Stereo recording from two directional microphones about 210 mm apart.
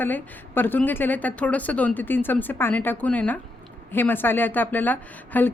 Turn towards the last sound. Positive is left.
turn(degrees=10)  # may be behind; listen again after turning